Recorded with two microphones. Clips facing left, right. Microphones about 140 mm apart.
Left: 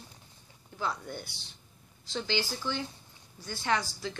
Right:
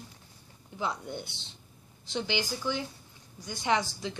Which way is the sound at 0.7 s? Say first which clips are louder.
Right 1 dB; 20° right (ahead or behind).